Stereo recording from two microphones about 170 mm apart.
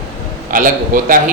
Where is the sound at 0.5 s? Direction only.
55° right (ahead or behind).